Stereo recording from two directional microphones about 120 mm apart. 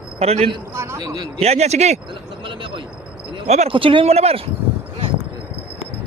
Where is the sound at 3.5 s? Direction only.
70° right (ahead or behind).